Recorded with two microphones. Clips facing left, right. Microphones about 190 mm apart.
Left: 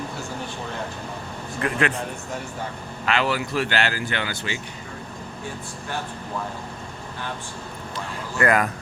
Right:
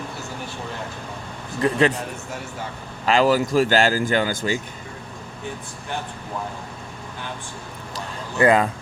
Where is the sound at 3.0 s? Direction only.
40° right (ahead or behind).